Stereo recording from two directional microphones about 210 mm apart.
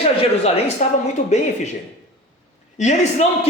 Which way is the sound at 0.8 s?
35° left (ahead or behind).